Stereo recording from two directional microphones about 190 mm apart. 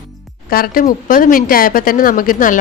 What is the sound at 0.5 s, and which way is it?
A woman's voice, 50° left (ahead or behind).